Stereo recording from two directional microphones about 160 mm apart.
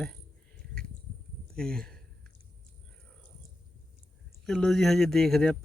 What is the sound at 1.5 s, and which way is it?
Speech, 5° left (ahead or behind).